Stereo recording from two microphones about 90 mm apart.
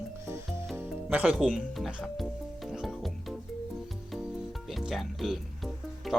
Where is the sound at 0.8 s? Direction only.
15° right (ahead or behind).